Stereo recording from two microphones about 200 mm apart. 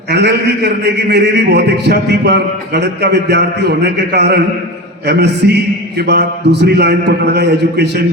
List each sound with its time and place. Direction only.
0.1 s a man's voice: 55° right (ahead or behind)